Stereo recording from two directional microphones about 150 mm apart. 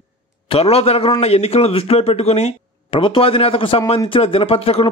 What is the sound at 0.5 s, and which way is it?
Speech, 40° left (ahead or behind).